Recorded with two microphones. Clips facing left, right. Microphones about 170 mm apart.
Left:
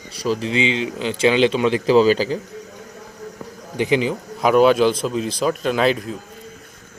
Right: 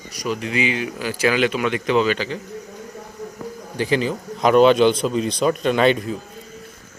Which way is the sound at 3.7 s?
20° left (ahead or behind).